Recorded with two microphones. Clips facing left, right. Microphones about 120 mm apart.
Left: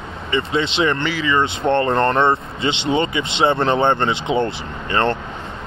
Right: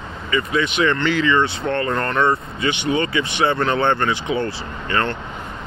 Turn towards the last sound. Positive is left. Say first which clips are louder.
# left 3 dB
turn(degrees=25)  # may be behind; listen again after turning